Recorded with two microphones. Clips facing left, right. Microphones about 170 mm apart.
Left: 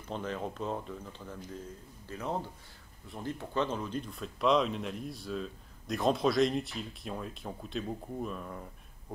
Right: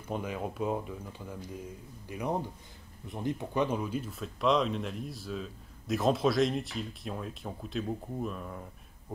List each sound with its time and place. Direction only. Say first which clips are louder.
0.1 s speech: right 1 dB; 10° right (ahead or behind)